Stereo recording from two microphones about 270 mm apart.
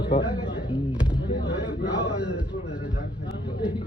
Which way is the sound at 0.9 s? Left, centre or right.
Centre.